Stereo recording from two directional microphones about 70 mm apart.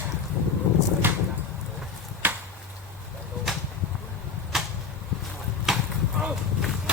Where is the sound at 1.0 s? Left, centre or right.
Right.